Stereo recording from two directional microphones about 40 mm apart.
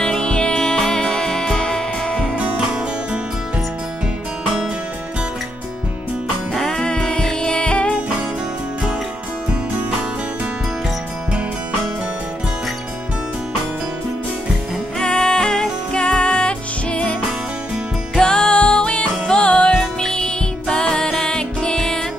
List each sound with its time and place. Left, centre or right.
0.0 s music: centre
2.3 s music: right
6.7 s music: centre
15.0 s music: centre
18.1 s music: centre
20.0 s music: centre